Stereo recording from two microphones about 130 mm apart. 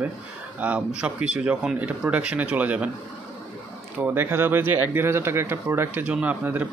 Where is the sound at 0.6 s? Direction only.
10° right (ahead or behind).